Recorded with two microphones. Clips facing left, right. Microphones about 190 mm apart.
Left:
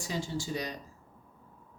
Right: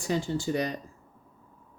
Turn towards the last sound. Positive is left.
turn(degrees=-55)  # may be behind; listen again after turning